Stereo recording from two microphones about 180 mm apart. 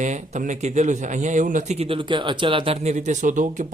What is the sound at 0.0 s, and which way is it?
A man's voice, 40° right (ahead or behind).